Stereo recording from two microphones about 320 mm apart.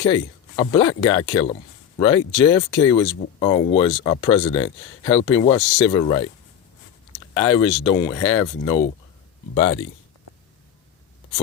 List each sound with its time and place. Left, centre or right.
0.0 s speech: centre
7.3 s speech: centre